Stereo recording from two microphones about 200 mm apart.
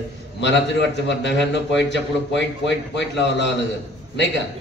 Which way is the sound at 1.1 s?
60° left (ahead or behind).